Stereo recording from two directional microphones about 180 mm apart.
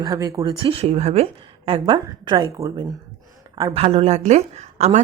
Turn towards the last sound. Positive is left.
turn(degrees=-40)  # may be behind; listen again after turning